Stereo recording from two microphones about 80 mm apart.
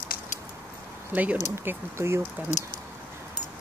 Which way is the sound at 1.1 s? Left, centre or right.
Centre.